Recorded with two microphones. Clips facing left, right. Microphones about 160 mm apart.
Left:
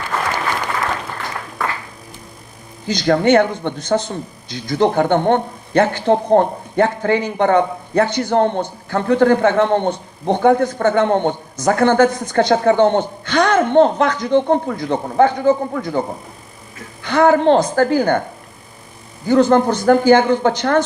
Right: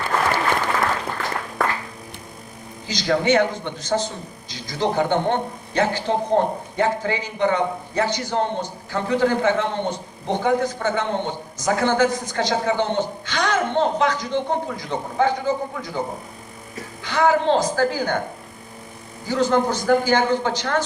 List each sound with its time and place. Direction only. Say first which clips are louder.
2.8 s a man's voice: left 5 dB; 55° left (ahead or behind)
17.0 s a man's voice: left 6 dB; 55° left (ahead or behind)
19.3 s a man's voice: left 7 dB; 55° left (ahead or behind)